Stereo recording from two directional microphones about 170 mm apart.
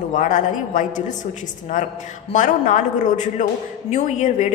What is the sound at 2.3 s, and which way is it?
A man's voice, 45° left (ahead or behind).